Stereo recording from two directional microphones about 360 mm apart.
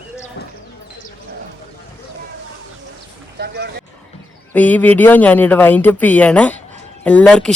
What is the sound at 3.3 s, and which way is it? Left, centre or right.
Speech, right.